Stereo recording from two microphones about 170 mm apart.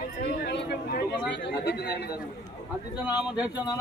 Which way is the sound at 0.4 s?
70° left (ahead or behind).